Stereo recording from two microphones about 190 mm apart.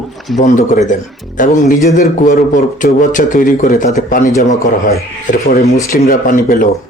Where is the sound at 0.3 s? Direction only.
40° left (ahead or behind).